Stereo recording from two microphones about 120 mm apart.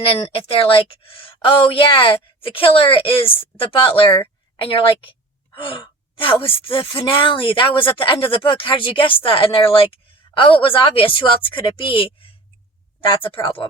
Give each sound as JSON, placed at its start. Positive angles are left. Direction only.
{"t": 0.0, "sound": "speech", "side_deg": 50}
{"t": 13.1, "sound": "speech", "side_deg": 45}